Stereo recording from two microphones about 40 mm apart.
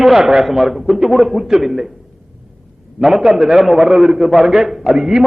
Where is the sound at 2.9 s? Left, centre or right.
Centre.